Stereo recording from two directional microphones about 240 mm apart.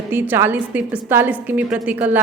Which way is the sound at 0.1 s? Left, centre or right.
Centre.